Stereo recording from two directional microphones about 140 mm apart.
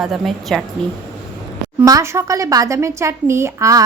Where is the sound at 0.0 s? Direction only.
Centre (ahead or behind).